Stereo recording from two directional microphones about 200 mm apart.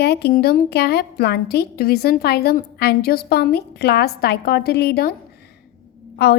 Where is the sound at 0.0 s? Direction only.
55° left (ahead or behind).